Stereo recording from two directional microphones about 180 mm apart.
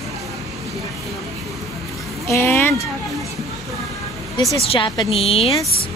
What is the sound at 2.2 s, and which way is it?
Speech, 15° left (ahead or behind).